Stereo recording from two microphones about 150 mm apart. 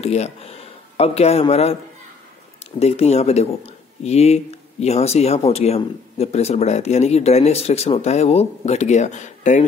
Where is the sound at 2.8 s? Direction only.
45° left (ahead or behind).